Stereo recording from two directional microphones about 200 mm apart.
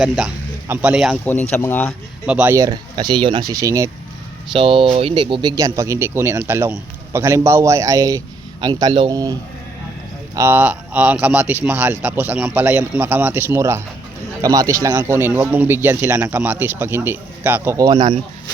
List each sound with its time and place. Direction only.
0.0 s speech: 5° right (ahead or behind)
1.2 s speech: 10° left (ahead or behind)
2.2 s speech: 5° right (ahead or behind)
4.5 s speech: 25° right (ahead or behind)
10.3 s speech: 10° right (ahead or behind)